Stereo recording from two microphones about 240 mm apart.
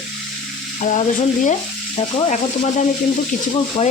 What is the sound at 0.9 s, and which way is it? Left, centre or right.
Speech, left.